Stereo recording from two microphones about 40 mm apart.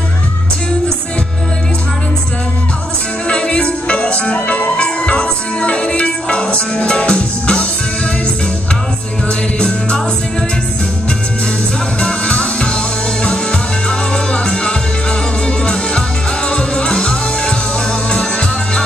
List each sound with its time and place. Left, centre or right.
3.3 s music: left
9.6 s music: left
12.0 s music: left